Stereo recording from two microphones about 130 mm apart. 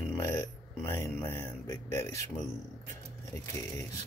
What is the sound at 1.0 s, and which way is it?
Speech, 25° left (ahead or behind).